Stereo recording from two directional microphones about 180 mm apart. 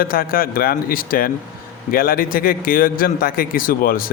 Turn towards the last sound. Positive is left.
turn(degrees=55)  # may be behind; listen again after turning